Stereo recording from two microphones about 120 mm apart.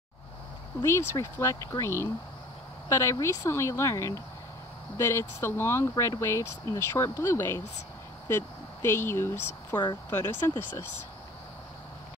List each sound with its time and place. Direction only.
0.8 s speech: 20° left (ahead or behind)